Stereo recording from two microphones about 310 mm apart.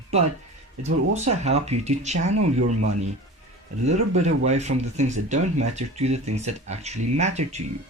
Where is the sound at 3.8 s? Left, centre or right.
Right.